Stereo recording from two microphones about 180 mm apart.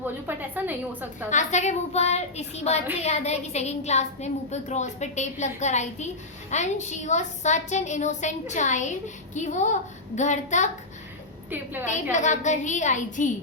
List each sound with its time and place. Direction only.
0.0 s a sound: 10° right (ahead or behind)
1.3 s a woman's voice: 40° left (ahead or behind)
11.5 s a woman's voice: 10° right (ahead or behind)
12.1 s a woman's voice: 40° left (ahead or behind)